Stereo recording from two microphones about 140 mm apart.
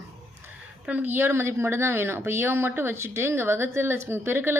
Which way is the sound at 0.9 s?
15° right (ahead or behind).